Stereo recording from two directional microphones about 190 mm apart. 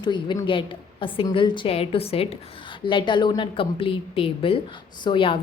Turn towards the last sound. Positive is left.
turn(degrees=25)  # may be behind; listen again after turning